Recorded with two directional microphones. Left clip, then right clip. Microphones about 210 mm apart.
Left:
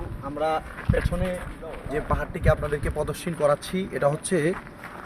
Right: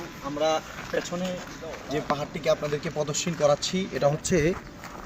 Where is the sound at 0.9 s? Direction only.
40° left (ahead or behind).